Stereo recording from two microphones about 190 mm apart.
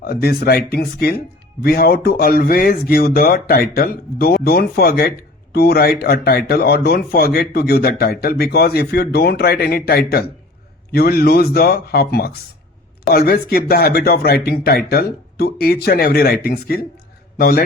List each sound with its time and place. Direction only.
0.0 s a man's voice: 55° left (ahead or behind)